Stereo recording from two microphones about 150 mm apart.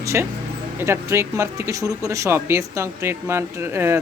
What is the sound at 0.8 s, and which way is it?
Speech, 15° right (ahead or behind).